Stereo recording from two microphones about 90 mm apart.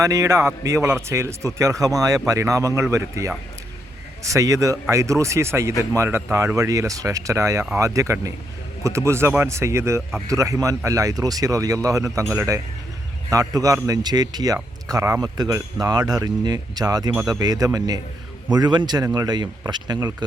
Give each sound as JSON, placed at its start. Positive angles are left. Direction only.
{"t": 0.0, "sound": "speech", "side_deg": -35}
{"t": 19.0, "sound": "speech", "side_deg": -40}